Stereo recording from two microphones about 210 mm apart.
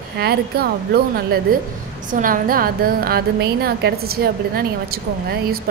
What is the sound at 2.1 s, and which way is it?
A woman's voice, 40° right (ahead or behind).